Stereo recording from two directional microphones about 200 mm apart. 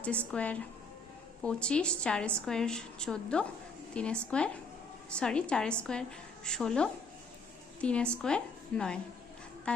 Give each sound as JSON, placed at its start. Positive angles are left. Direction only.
{"t": 0.3, "sound": "a woman's voice", "side_deg": 5}